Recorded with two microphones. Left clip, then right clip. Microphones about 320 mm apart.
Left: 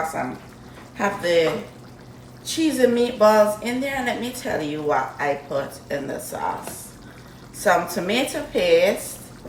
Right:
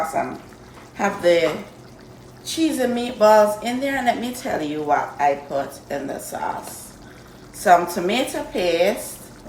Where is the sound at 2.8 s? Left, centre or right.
Centre.